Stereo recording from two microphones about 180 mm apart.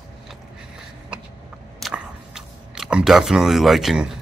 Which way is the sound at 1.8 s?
5° right (ahead or behind).